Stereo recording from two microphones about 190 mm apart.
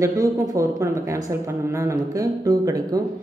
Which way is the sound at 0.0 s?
15° right (ahead or behind).